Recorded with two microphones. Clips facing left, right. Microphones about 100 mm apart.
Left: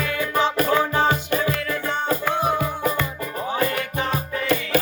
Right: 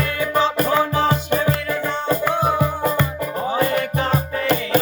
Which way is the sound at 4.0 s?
45° right (ahead or behind).